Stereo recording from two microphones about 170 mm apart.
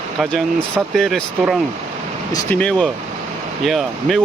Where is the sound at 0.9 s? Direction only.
Centre (ahead or behind).